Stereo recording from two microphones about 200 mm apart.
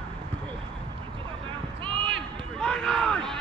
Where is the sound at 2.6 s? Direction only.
5° left (ahead or behind).